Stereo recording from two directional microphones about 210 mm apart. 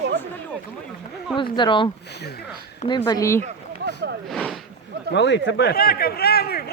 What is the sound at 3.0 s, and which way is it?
Speech, 15° left (ahead or behind).